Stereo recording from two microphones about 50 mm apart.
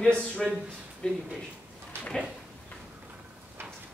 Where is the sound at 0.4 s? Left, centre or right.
Centre.